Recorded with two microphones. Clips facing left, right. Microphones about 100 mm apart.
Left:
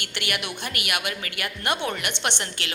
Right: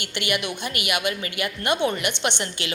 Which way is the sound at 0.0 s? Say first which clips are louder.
Right 4 dB; centre (ahead or behind).